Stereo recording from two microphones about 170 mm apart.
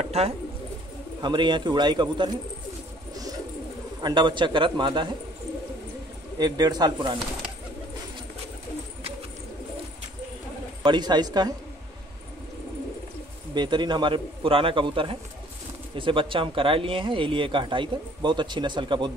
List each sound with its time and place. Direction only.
0.2 s a man's voice: 35° right (ahead or behind)
4.0 s speech: 25° right (ahead or behind)
6.3 s speech: 25° right (ahead or behind)
10.8 s speech: 25° right (ahead or behind)
13.6 s a man's voice: 25° right (ahead or behind)